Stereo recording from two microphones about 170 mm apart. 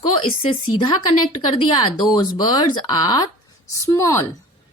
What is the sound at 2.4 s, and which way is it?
A woman's voice, 25° left (ahead or behind).